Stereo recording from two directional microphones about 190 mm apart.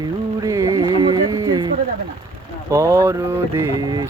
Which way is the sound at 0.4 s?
15° right (ahead or behind).